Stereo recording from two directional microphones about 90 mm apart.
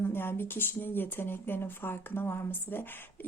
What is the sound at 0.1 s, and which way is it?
A woman's voice, 25° left (ahead or behind).